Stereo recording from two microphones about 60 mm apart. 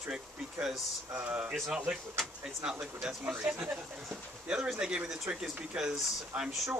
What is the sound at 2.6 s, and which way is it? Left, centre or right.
Speech, centre.